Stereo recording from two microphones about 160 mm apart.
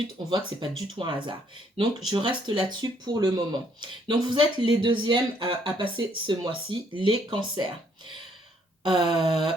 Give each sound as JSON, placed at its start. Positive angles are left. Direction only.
{"t": 0.3, "sound": "speech", "side_deg": -30}
{"t": 8.8, "sound": "speech", "side_deg": -30}